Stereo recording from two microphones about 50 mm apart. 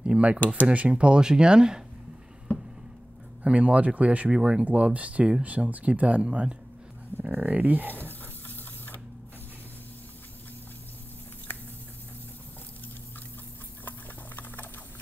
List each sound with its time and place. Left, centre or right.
0.0 s a sound: right
0.7 s speech: right
2.5 s a sound: left
3.4 s speech: right
6.2 s speech: centre
7.4 s speech: right
7.9 s printer: left
13.8 s sewing machine: left